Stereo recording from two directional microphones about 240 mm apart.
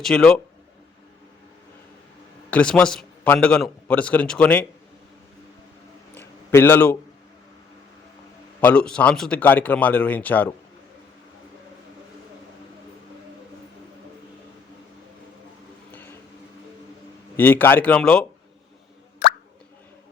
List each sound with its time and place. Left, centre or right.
0.0 s a man's voice: centre
2.5 s a man's voice: centre
6.1 s a sound: centre
8.6 s speech: centre
15.9 s a sound: centre
17.3 s speech: centre
19.2 s plop: left